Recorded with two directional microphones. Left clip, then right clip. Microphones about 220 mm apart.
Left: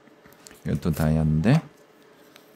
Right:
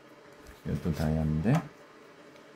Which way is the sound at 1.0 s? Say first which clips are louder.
Left 7 dB; 45° left (ahead or behind).